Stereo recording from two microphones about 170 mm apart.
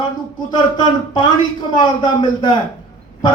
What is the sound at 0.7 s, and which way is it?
A man's voice, 25° left (ahead or behind).